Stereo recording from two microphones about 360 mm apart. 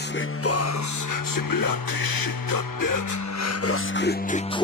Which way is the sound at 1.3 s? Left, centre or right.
Left.